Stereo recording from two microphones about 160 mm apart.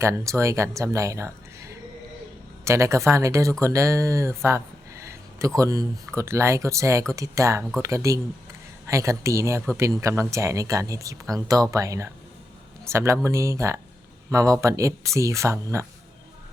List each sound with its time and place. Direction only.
0.0 s speech: 20° right (ahead or behind)
2.6 s speech: 20° right (ahead or behind)